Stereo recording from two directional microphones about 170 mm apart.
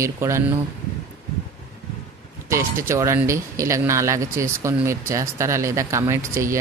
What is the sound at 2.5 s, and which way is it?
Speech, 15° right (ahead or behind).